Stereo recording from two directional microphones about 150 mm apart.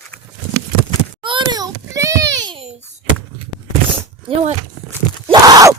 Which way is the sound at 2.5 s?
45° right (ahead or behind).